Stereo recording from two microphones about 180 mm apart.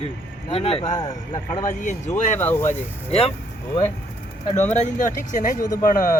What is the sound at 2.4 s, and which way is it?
Speech, 10° left (ahead or behind).